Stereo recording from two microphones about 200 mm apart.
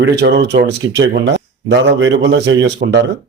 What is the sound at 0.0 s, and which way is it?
Speech, 60° right (ahead or behind).